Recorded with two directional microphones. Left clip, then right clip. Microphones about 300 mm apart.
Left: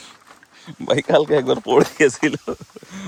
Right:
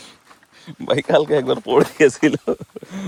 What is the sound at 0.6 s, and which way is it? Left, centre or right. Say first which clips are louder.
Speech: even; centre.